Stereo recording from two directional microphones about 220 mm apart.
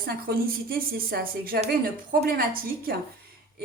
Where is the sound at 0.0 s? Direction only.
40° right (ahead or behind).